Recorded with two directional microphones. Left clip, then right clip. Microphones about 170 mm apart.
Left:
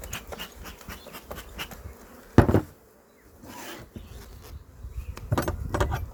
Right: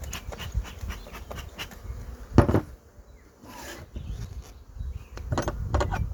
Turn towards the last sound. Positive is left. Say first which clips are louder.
# even
turn(degrees=10)  # may be behind; listen again after turning